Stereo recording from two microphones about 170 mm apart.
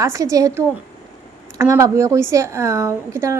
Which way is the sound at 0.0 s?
20° right (ahead or behind).